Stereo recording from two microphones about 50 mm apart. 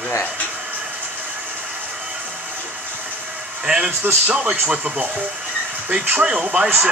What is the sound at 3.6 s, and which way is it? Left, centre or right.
Speech, centre.